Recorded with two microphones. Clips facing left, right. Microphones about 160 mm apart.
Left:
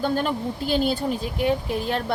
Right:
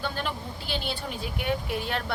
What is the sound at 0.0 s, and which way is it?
A woman's voice, 45° left (ahead or behind).